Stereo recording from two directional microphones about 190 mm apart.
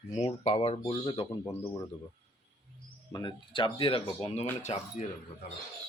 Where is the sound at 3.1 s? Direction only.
20° left (ahead or behind).